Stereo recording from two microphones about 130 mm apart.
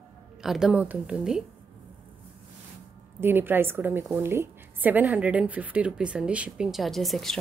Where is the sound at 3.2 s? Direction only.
15° right (ahead or behind).